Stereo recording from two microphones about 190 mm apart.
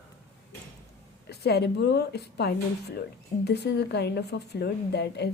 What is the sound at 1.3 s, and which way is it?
A woman's voice, 60° left (ahead or behind).